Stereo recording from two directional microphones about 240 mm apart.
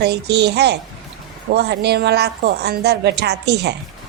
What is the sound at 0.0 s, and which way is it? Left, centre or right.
A woman's voice, right.